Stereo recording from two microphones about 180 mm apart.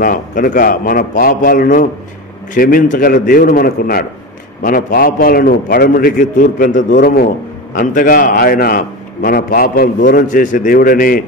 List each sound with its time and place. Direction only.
0.0 s a man's voice: 50° left (ahead or behind)
7.0 s a man's voice: 60° left (ahead or behind)
7.7 s a man's voice: 45° left (ahead or behind)